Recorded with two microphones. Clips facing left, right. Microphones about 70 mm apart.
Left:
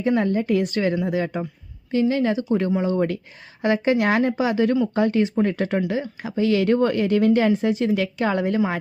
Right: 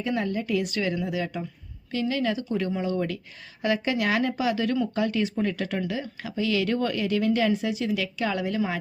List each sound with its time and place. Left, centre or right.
0.0 s a woman's voice: left